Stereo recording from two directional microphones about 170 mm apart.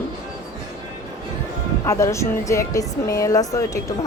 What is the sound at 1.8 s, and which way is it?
Speech, 15° left (ahead or behind).